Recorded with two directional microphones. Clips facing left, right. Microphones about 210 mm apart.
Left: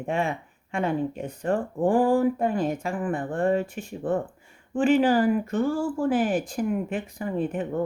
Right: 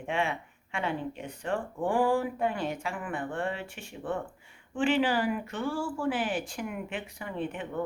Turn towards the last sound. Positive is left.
turn(degrees=40)  # may be behind; listen again after turning